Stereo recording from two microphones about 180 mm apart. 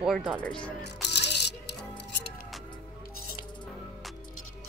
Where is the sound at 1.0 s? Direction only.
70° left (ahead or behind).